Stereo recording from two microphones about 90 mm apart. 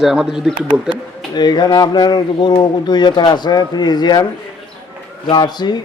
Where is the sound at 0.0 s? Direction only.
5° right (ahead or behind).